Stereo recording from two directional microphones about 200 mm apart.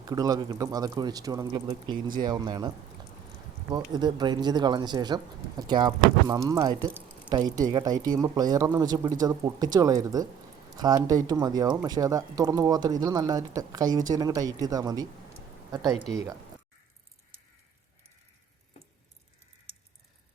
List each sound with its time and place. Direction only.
0.0 s speech: 20° right (ahead or behind)